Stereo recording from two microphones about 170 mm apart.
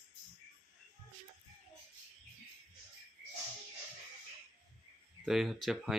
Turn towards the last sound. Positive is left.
turn(degrees=0)  # may be behind; listen again after turning